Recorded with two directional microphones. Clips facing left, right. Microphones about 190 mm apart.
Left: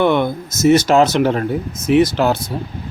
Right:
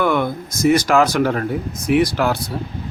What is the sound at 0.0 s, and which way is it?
Speech, 25° left (ahead or behind).